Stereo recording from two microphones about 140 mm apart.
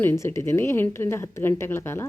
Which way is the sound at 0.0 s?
15° left (ahead or behind).